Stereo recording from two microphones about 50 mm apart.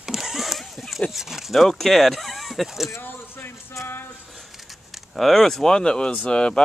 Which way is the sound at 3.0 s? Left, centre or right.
Left.